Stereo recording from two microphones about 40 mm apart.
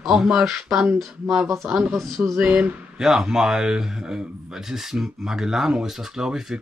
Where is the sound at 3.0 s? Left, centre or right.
Centre.